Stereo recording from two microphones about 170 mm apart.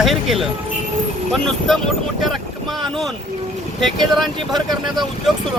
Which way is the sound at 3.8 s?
Centre (ahead or behind).